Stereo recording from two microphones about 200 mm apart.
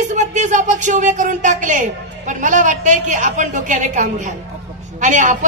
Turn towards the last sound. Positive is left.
turn(degrees=-40)  # may be behind; listen again after turning